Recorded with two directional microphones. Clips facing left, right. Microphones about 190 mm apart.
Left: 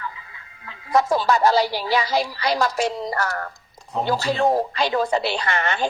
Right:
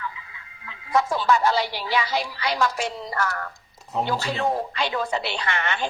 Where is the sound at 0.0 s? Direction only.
40° left (ahead or behind).